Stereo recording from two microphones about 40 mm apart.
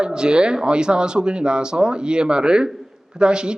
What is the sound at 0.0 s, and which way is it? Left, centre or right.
Speech, right.